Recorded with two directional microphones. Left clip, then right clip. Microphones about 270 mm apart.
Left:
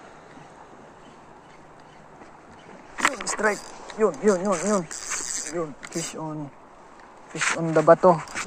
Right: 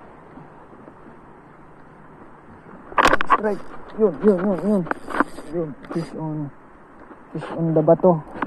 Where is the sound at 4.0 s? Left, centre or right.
Left.